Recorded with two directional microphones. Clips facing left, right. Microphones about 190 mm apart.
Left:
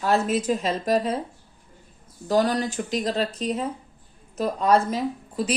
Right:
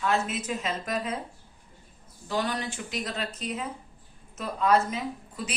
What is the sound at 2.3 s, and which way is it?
Speech, 40° left (ahead or behind).